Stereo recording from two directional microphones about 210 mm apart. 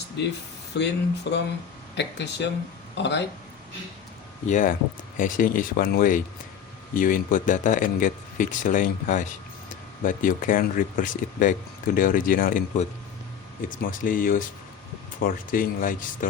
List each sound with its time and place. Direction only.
0.2 s speech: 55° left (ahead or behind)
4.4 s speech: 40° left (ahead or behind)